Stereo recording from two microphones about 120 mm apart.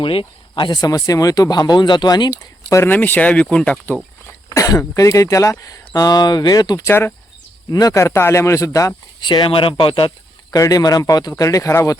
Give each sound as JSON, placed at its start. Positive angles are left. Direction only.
{"t": 0.0, "sound": "speech", "side_deg": 45}
{"t": 4.4, "sound": "speech", "side_deg": 30}
{"t": 6.8, "sound": "speech", "side_deg": 20}
{"t": 9.2, "sound": "speech", "side_deg": 40}
{"t": 10.5, "sound": "speech", "side_deg": 30}